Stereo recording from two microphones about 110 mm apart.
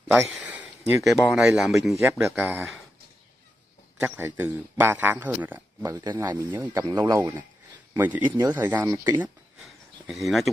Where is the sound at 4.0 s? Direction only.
20° right (ahead or behind).